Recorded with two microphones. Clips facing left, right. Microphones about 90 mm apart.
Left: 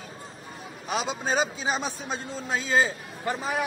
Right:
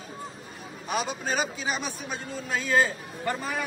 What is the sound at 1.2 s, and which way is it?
Speech, 30° left (ahead or behind).